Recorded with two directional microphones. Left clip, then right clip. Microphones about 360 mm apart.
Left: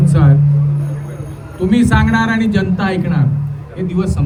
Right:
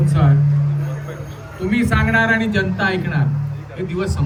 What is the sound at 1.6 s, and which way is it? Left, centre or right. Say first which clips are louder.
Speech: left 4 dB; left.